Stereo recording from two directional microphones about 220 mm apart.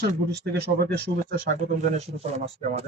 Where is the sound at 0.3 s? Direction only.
50° right (ahead or behind).